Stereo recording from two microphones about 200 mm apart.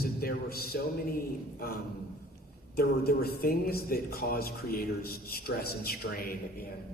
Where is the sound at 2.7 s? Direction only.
50° left (ahead or behind).